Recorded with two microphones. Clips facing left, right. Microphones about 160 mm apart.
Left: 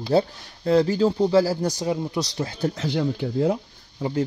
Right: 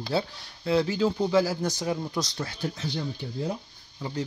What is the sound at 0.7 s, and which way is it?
Speech, 40° left (ahead or behind).